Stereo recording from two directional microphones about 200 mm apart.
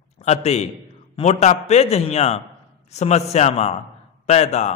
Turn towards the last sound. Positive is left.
turn(degrees=35)  # may be behind; listen again after turning